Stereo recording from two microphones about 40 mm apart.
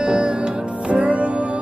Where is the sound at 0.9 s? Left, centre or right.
Right.